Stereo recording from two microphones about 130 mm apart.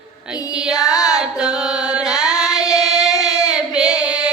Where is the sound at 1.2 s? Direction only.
5° right (ahead or behind).